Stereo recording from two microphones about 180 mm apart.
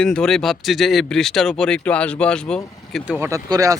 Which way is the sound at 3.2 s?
15° right (ahead or behind).